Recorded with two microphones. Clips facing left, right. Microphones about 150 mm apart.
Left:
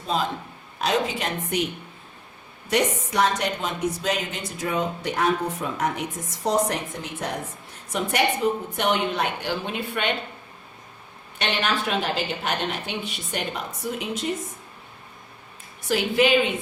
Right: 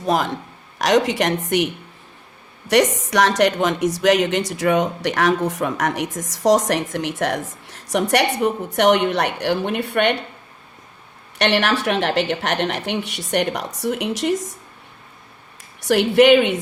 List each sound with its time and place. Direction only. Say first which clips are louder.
0.0 s a man's voice: right 6 dB; 80° right
11.3 s a woman's voice: right 7 dB; 75° right (ahead or behind)
15.9 s a woman's voice: right 8 dB; 70° right (ahead or behind)